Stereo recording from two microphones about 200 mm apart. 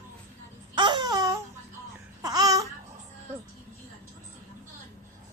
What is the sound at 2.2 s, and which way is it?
Babbling, 20° right (ahead or behind).